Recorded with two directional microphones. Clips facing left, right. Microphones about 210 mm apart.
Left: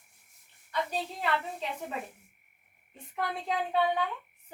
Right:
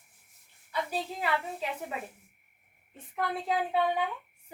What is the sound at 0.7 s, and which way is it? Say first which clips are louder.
Speech: even; 5° right (ahead or behind).